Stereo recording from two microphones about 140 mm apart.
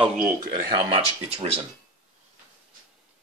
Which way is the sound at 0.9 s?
45° right (ahead or behind).